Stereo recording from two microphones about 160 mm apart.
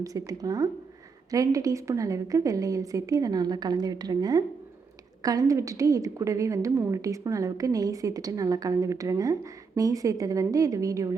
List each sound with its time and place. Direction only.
0.0 s a woman's voice: 20° right (ahead or behind)